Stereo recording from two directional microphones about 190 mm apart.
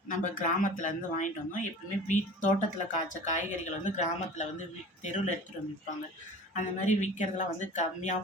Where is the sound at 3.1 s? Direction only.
40° left (ahead or behind).